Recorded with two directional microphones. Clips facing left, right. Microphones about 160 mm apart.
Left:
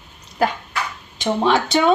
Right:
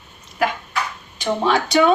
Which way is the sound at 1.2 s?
25° left (ahead or behind).